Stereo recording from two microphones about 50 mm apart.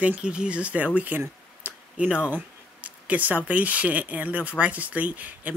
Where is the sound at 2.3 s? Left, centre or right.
Right.